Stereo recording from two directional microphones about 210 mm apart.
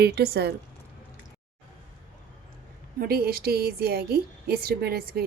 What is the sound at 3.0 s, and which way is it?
A woman's voice, 45° right (ahead or behind).